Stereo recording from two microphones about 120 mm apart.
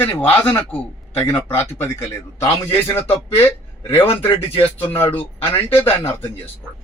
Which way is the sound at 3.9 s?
20° left (ahead or behind).